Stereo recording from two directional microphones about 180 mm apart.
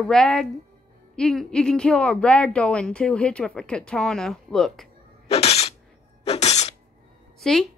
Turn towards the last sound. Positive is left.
turn(degrees=5)  # may be behind; listen again after turning